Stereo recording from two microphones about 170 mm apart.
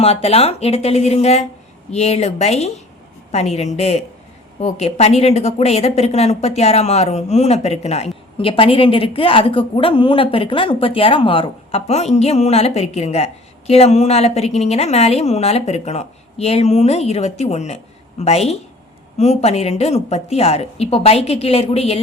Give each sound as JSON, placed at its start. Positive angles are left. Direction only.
{"t": 0.0, "sound": "speech", "side_deg": 35}